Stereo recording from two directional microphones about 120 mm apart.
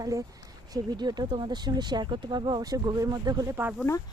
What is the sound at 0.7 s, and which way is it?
Speech, 35° right (ahead or behind).